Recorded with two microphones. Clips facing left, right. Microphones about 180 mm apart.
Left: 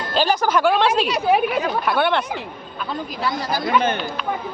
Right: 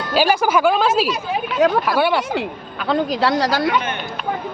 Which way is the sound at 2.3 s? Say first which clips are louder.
Right 6 dB; 80° right.